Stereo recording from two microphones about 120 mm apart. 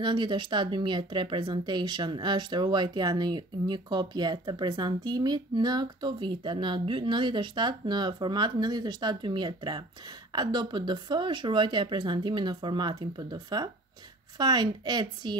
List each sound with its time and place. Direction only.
0.0 s speech: 40° right (ahead or behind)